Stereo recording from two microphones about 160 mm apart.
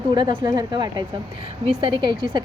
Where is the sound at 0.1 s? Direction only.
25° right (ahead or behind).